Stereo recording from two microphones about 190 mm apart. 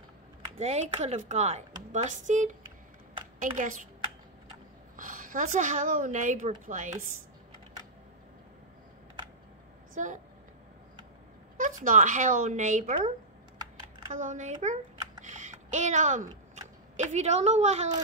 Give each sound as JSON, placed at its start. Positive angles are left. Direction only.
{"t": 0.6, "sound": "a woman's voice", "side_deg": -35}
{"t": 4.9, "sound": "a woman's voice", "side_deg": -45}
{"t": 10.0, "sound": "speech", "side_deg": -40}
{"t": 11.5, "sound": "speech", "side_deg": -45}
{"t": 14.1, "sound": "speech", "side_deg": -40}
{"t": 15.2, "sound": "a sound", "side_deg": -40}